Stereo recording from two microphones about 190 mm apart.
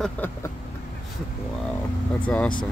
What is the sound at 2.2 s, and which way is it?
Speech, 5° left (ahead or behind).